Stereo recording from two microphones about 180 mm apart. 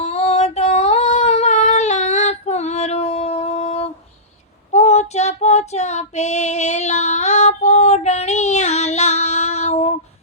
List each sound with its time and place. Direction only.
0.0 s female singing: 35° left (ahead or behind)
4.7 s child singing: 40° left (ahead or behind)